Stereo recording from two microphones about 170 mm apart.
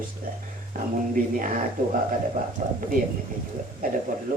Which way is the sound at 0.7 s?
50° right (ahead or behind).